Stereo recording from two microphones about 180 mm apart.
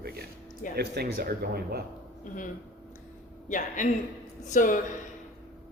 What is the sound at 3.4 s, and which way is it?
Speech, 45° left (ahead or behind).